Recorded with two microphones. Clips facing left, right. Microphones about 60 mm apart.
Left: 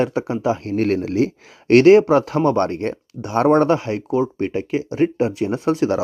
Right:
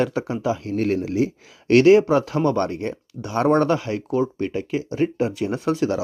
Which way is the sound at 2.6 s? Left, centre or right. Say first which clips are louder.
Left 4 dB; left.